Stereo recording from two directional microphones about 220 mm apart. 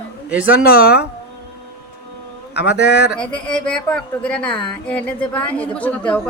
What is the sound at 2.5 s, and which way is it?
Speech, 50° left (ahead or behind).